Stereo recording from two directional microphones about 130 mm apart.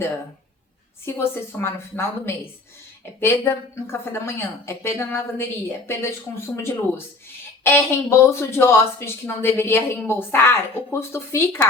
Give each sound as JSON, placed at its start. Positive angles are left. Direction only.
{"t": 1.0, "sound": "a woman's voice", "side_deg": 15}